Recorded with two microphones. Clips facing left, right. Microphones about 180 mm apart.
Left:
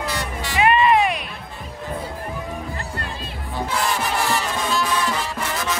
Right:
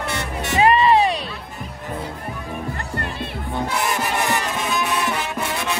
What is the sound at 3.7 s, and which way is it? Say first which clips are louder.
Music: left 1 dB; 20° right (ahead or behind).